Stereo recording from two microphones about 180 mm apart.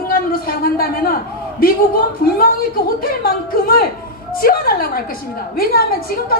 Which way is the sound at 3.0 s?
55° left (ahead or behind).